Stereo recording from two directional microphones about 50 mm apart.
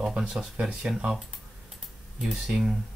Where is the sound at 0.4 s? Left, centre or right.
Centre.